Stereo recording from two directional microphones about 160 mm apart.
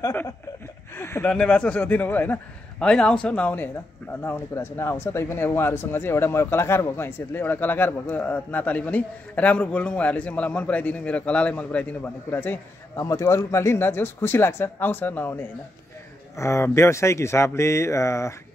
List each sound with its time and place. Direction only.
0.0 s speech: 15° left (ahead or behind)